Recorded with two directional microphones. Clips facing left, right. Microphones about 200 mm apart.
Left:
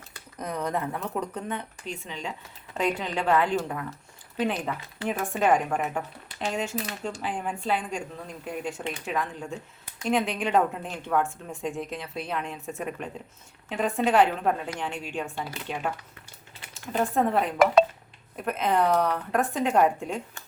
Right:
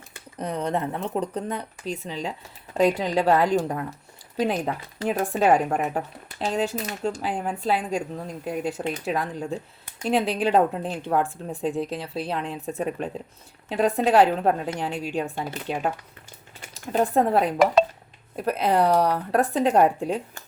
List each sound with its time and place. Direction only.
0.1 s speech: 30° right (ahead or behind)